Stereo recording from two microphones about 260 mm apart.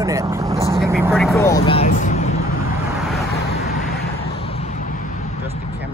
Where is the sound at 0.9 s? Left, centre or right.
Centre.